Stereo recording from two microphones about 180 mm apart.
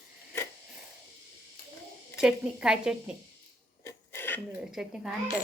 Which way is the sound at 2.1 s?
5° right (ahead or behind).